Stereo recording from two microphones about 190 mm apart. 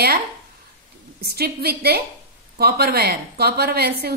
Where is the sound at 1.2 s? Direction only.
55° right (ahead or behind).